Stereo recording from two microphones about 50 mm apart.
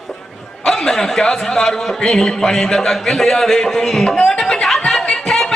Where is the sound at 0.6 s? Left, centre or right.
Centre.